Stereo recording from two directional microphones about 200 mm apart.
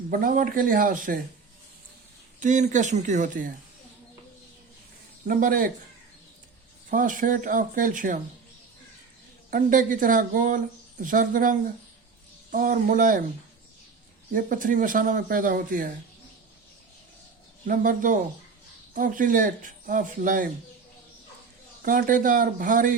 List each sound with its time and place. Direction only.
0.1 s speech: 45° right (ahead or behind)
2.4 s speech: 40° right (ahead or behind)
5.3 s speech: 45° right (ahead or behind)
6.9 s speech: 40° right (ahead or behind)
9.5 s speech: 40° right (ahead or behind)
14.3 s speech: 40° right (ahead or behind)
17.7 s speech: 40° right (ahead or behind)
21.8 s speech: 45° right (ahead or behind)